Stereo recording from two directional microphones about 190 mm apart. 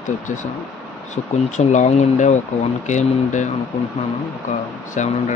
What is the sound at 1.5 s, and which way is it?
Speech, 40° left (ahead or behind).